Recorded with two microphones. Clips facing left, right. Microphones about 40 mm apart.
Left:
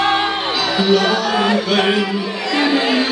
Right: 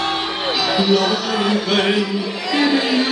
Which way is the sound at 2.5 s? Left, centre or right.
Centre.